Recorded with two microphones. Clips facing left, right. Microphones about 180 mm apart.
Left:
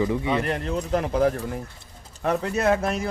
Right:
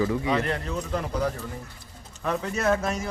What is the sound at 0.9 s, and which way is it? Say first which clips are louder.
Speech: left 7 dB; 55° left (ahead or behind).